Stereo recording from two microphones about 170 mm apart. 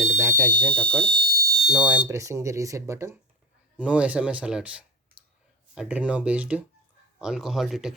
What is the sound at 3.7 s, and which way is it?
Speech, 5° right (ahead or behind).